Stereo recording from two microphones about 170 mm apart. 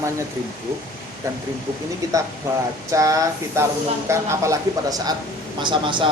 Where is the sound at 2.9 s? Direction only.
20° right (ahead or behind).